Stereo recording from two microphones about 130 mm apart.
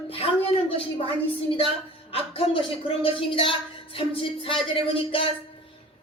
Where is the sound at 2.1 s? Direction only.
45° left (ahead or behind).